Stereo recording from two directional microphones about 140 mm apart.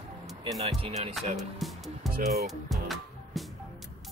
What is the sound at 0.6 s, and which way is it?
Speech, 45° right (ahead or behind).